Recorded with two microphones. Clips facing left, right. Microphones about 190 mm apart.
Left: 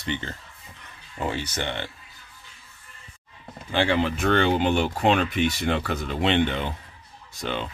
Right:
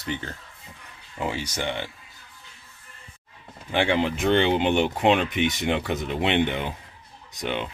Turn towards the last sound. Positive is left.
turn(degrees=-15)  # may be behind; listen again after turning